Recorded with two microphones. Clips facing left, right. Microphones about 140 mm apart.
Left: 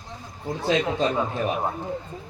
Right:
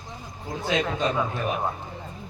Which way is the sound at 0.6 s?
35° left (ahead or behind).